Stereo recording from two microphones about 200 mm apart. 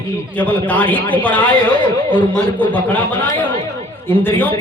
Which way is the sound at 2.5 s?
10° left (ahead or behind).